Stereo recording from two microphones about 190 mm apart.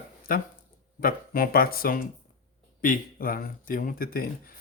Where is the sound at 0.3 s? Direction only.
50° left (ahead or behind).